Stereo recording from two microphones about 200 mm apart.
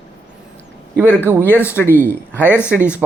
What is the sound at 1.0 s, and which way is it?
Speech, 10° right (ahead or behind).